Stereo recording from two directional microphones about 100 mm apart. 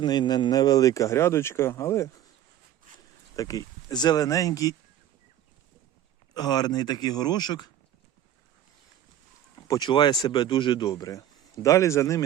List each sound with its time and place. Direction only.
0.0 s speech: 45° left (ahead or behind); by 2.0 s 30° left (ahead or behind)
3.3 s speech: 35° left (ahead or behind)
6.3 s a man's voice: 40° left (ahead or behind)
9.6 s speech: 45° left (ahead or behind)